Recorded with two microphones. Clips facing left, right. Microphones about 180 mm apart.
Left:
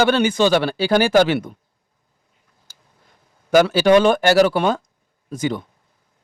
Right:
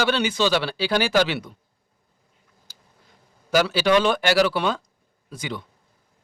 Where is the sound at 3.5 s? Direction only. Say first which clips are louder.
Left 6 dB; 50° left (ahead or behind).